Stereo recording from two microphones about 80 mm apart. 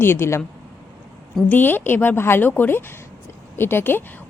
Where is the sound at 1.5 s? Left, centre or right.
Left.